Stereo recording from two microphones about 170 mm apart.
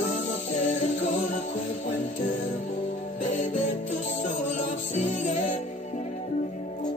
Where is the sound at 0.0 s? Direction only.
45° left (ahead or behind).